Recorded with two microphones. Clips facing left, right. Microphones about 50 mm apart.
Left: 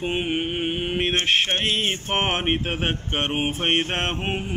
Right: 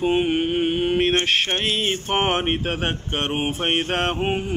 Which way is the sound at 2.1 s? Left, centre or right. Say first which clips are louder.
Right 3 dB; centre.